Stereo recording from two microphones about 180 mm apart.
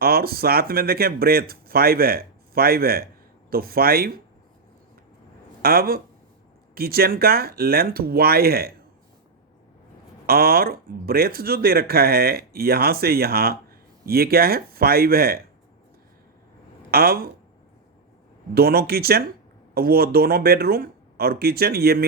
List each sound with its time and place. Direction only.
0.0 s speech: 55° right (ahead or behind)
5.6 s speech: 55° right (ahead or behind)
10.2 s speech: 55° right (ahead or behind)
16.9 s speech: 55° right (ahead or behind)
18.5 s speech: 60° right (ahead or behind)